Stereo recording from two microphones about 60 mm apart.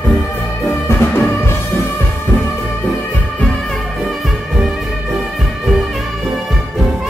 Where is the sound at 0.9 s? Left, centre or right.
Left.